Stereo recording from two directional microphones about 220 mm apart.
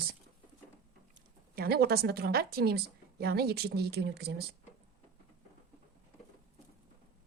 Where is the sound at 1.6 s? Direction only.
45° right (ahead or behind).